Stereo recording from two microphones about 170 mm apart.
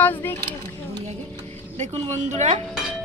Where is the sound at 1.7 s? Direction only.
45° right (ahead or behind).